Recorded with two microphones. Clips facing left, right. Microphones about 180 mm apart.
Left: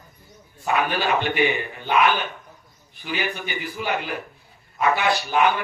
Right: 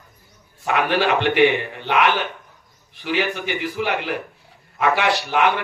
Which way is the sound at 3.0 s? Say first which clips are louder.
Right 5 dB; 75° right (ahead or behind).